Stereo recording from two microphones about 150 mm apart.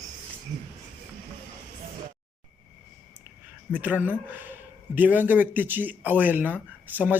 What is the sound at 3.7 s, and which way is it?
Speech, 10° right (ahead or behind).